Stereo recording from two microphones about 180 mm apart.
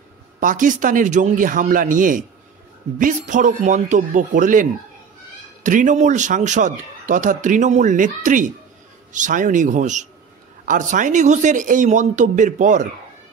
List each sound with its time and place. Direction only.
0.4 s a man's voice: 45° right (ahead or behind)